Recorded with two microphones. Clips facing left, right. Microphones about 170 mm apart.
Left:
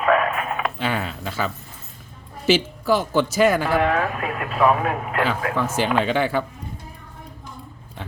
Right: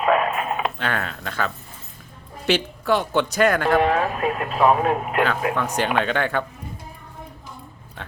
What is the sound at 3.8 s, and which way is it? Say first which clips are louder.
Speech: right 1 dB; 25° right (ahead or behind).